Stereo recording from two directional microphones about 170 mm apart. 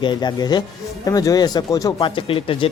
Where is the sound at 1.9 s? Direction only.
30° left (ahead or behind).